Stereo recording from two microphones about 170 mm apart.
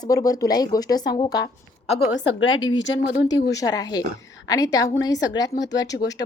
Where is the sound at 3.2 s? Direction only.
20° left (ahead or behind).